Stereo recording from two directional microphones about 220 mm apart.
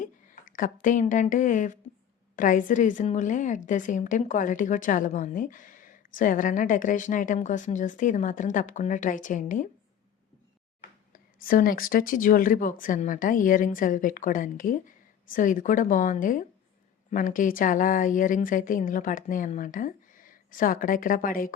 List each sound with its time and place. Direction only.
0.0 s a woman's voice: 35° left (ahead or behind)
11.3 s a woman's voice: 40° left (ahead or behind)